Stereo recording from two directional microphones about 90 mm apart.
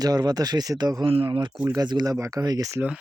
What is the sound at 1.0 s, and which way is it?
Speech, 75° right (ahead or behind).